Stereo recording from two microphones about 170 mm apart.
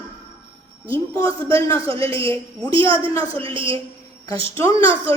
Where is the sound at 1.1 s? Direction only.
20° left (ahead or behind).